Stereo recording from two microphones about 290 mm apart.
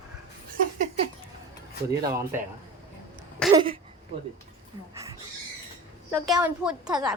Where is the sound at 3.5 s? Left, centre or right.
Centre.